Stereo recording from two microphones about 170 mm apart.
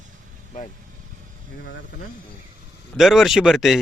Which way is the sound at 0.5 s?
50° left (ahead or behind).